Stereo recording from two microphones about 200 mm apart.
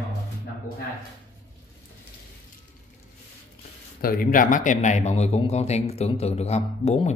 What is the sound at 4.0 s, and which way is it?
A man's voice, 45° left (ahead or behind).